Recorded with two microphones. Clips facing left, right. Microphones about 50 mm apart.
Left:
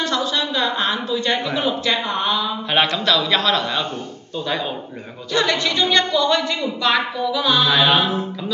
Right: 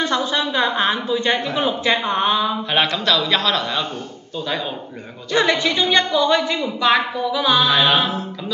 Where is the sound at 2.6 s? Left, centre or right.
Centre.